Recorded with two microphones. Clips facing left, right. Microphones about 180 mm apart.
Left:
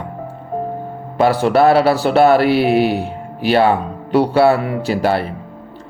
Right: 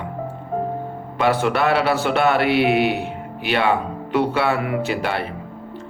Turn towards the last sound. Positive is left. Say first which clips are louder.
# left 6 dB
turn(degrees=35)  # may be behind; listen again after turning